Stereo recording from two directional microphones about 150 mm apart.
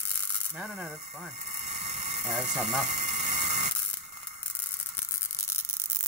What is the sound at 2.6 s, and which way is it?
Speech, 55° right (ahead or behind).